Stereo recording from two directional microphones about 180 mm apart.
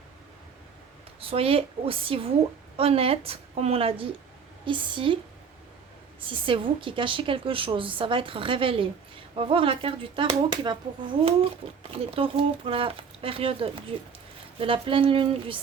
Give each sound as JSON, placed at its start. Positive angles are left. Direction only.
{"t": 1.2, "sound": "a woman's voice", "side_deg": -30}
{"t": 6.2, "sound": "a woman's voice", "side_deg": -30}
{"t": 11.9, "sound": "a woman's voice", "side_deg": -30}